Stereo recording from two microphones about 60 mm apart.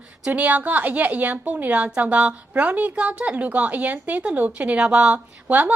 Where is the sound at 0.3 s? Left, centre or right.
Right.